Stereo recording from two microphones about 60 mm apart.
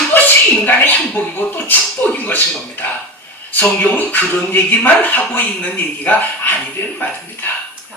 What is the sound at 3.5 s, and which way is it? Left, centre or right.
Speech, left.